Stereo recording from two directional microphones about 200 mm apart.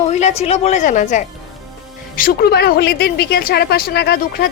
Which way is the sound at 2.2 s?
50° left (ahead or behind).